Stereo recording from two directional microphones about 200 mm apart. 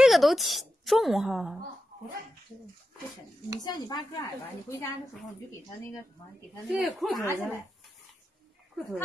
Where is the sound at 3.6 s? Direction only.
20° left (ahead or behind).